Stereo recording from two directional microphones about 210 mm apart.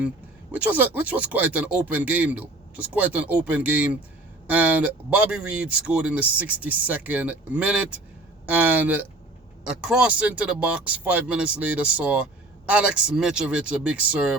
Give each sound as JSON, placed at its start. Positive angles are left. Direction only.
{"t": 0.5, "sound": "speech", "side_deg": -10}